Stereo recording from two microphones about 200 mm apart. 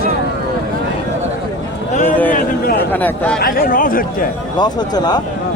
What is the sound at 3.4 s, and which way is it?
Speech, 50° left (ahead or behind).